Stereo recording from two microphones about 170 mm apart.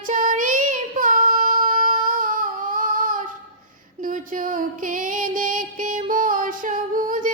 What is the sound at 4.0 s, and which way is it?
Music, 50° right (ahead or behind).